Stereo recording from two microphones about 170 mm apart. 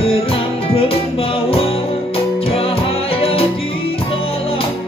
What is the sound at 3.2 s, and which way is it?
Music, 35° left (ahead or behind).